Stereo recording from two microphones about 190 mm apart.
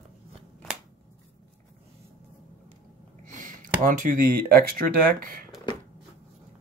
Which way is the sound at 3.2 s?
45° right (ahead or behind).